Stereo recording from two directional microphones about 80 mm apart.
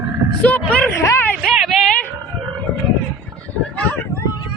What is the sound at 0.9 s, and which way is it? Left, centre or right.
Speech, left.